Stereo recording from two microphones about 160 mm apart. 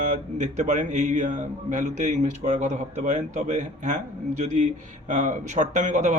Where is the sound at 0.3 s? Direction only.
50° right (ahead or behind).